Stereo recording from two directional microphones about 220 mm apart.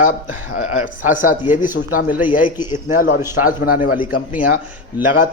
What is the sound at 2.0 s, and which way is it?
Speech, 10° right (ahead or behind).